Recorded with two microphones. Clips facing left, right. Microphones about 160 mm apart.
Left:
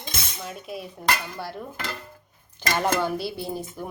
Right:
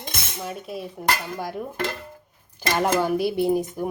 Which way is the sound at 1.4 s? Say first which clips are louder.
Right 5 dB; 10° right (ahead or behind).